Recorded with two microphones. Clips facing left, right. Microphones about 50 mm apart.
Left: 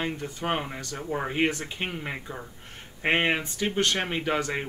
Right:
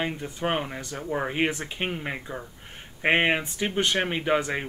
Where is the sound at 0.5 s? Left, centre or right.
Centre.